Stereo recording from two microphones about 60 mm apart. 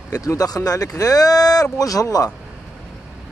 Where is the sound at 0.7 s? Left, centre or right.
Left.